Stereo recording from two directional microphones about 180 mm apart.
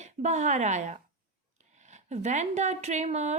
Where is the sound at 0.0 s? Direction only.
40° right (ahead or behind).